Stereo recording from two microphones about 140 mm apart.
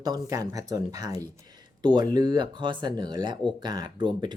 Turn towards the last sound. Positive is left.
turn(degrees=-30)  # may be behind; listen again after turning